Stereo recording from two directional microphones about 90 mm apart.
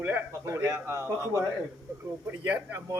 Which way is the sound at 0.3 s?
30° right (ahead or behind).